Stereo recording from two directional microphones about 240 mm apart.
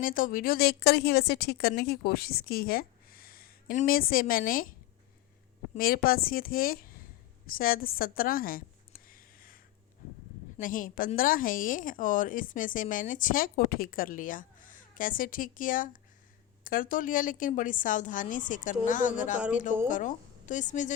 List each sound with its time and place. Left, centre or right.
0.0 s a woman's voice: left
5.7 s a woman's voice: left
9.0 s a sound: left
10.6 s a woman's voice: left